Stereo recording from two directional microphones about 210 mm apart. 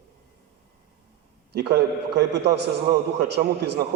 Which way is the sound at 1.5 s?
50° right (ahead or behind).